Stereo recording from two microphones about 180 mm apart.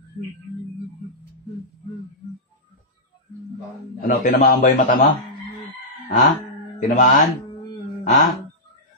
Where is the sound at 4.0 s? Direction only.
45° left (ahead or behind).